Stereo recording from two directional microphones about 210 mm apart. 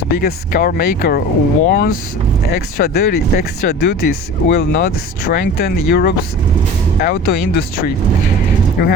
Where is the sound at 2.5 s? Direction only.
50° left (ahead or behind).